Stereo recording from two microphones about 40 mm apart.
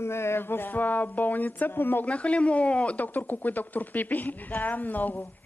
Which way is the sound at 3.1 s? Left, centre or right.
Left.